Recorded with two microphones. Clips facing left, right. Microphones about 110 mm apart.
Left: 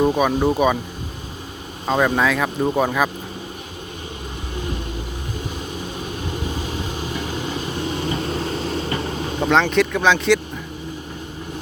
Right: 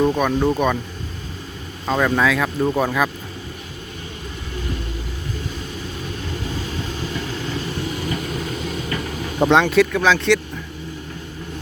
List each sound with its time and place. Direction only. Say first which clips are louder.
0.0 s speech: even; 15° left (ahead or behind)
1.9 s speech: left 1 dB; 15° left (ahead or behind)
2.2 s speech: right 1 dB; centre (ahead or behind)
5.7 s train: left 1 dB; 20° left (ahead or behind)
9.6 s speech: left 1 dB; 5° right (ahead or behind)